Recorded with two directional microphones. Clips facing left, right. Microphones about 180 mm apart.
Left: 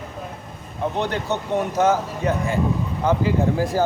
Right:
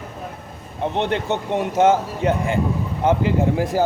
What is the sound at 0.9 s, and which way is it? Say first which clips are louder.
Speech: right 4 dB; 25° right (ahead or behind).